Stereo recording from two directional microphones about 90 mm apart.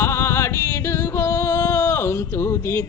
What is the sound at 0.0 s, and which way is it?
Music, 30° left (ahead or behind).